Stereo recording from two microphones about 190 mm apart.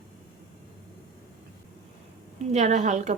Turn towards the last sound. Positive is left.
turn(degrees=-40)  # may be behind; listen again after turning